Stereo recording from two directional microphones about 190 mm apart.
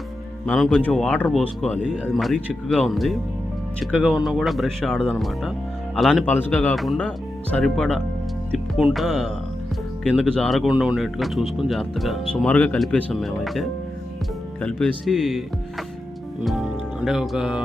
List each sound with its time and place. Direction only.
0.4 s speech: centre (ahead or behind)
10.3 s speech: 5° left (ahead or behind)